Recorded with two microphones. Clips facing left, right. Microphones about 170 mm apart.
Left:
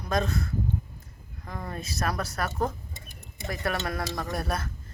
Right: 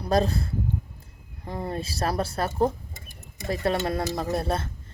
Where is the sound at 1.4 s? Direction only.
30° right (ahead or behind).